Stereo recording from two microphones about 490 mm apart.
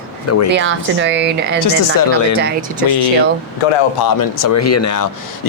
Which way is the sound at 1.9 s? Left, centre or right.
Left.